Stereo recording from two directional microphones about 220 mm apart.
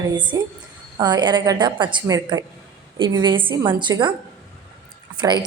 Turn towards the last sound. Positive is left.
turn(degrees=-20)  # may be behind; listen again after turning